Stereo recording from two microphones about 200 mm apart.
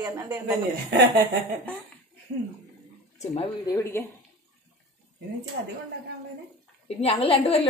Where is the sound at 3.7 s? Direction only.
15° left (ahead or behind).